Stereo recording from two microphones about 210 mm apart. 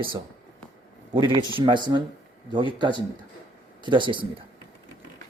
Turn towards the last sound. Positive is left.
turn(degrees=-25)  # may be behind; listen again after turning